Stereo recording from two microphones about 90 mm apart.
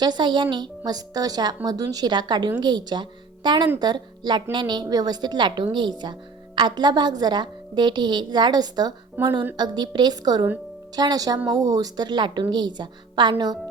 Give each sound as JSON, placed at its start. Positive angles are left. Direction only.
{"t": 0.0, "sound": "speech", "side_deg": -55}
{"t": 0.9, "sound": "a woman's voice", "side_deg": -45}
{"t": 9.2, "sound": "speech", "side_deg": -20}
{"t": 9.6, "sound": "a woman's voice", "side_deg": -50}